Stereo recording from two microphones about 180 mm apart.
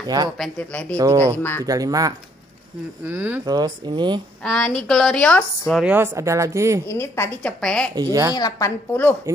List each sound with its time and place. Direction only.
0.0 s speech: 20° right (ahead or behind)
0.4 s a woman's voice: 5° left (ahead or behind)
0.9 s speech: 15° right (ahead or behind)
1.2 s a woman's voice: 10° left (ahead or behind)
1.7 s speech: 20° right (ahead or behind)
3.4 s speech: 20° right (ahead or behind)
4.4 s a woman's voice: 5° left (ahead or behind)
5.7 s speech: 5° right (ahead or behind)
6.9 s a woman's voice: 15° left (ahead or behind)
7.9 s speech: 20° right (ahead or behind)
8.4 s a woman's voice: 20° left (ahead or behind)